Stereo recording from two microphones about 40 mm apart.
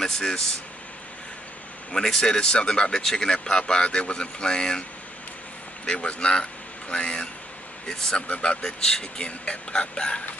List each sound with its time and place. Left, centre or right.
0.0 s speech: centre
1.9 s speech: centre
5.9 s speech: left
7.9 s speech: centre
8.3 s speech: left
8.8 s speech: centre
9.4 s speech: left